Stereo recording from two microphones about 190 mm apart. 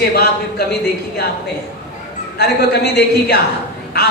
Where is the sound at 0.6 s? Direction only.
60° left (ahead or behind).